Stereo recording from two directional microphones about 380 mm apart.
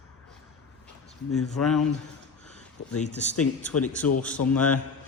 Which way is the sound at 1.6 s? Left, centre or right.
Centre.